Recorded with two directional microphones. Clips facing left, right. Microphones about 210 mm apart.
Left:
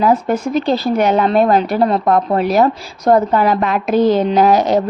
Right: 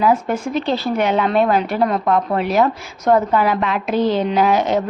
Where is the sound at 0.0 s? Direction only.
40° left (ahead or behind).